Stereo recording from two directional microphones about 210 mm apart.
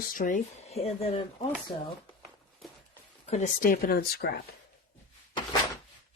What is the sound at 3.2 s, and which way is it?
Speech, 30° left (ahead or behind).